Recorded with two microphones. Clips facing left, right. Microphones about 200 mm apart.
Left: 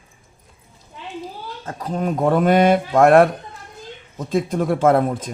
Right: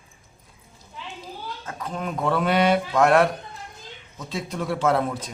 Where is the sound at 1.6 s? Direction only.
40° left (ahead or behind).